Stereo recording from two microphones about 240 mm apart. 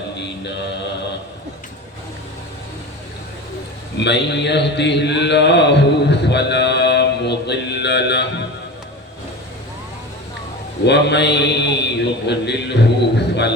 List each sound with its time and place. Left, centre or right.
3.9 s a man's voice: left
10.8 s a man's voice: left